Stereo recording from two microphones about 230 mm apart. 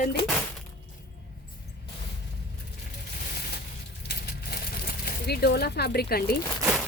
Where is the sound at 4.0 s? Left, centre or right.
Left.